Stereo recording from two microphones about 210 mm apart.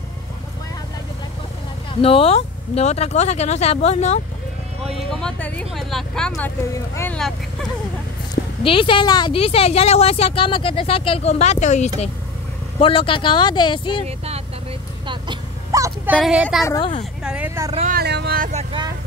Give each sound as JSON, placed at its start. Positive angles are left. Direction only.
{"t": 2.0, "sound": "speech", "side_deg": 25}
{"t": 5.2, "sound": "speech", "side_deg": 5}
{"t": 8.6, "sound": "a woman's voice", "side_deg": 25}
{"t": 14.0, "sound": "speech", "side_deg": -30}
{"t": 15.0, "sound": "vehicle", "side_deg": -20}
{"t": 16.2, "sound": "speech", "side_deg": -5}
{"t": 16.6, "sound": "speech", "side_deg": 15}
{"t": 17.2, "sound": "a sound", "side_deg": -5}
{"t": 17.7, "sound": "vehicle", "side_deg": -35}
{"t": 18.0, "sound": "vehicle", "side_deg": -50}
{"t": 18.5, "sound": "vehicle", "side_deg": -30}